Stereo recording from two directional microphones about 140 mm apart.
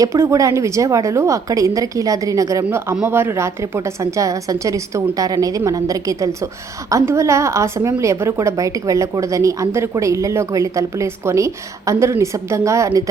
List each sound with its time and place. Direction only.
0.0 s a woman's voice: 20° right (ahead or behind)